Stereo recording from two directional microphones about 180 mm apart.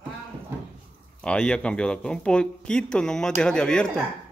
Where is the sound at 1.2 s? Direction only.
5° left (ahead or behind).